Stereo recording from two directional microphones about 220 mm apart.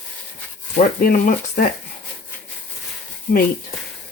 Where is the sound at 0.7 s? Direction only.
40° left (ahead or behind).